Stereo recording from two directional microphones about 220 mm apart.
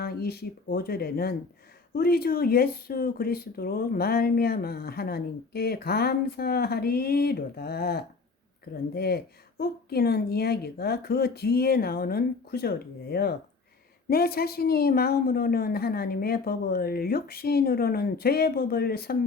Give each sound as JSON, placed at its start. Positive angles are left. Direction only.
{"t": 0.0, "sound": "speech", "side_deg": 45}